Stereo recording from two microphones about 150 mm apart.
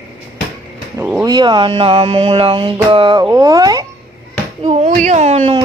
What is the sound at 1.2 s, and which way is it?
Speech, 30° right (ahead or behind).